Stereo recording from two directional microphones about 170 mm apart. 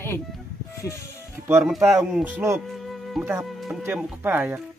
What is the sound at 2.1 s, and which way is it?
Speech, 10° right (ahead or behind).